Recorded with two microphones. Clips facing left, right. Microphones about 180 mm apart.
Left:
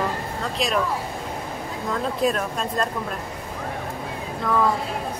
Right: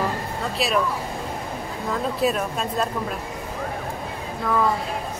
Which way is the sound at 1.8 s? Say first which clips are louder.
Even; 5° right (ahead or behind).